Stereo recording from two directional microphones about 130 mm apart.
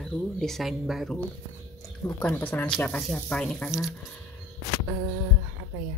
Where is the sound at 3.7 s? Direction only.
5° right (ahead or behind).